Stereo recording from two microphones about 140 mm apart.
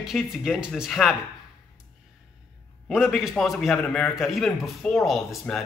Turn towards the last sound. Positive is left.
turn(degrees=0)  # may be behind; listen again after turning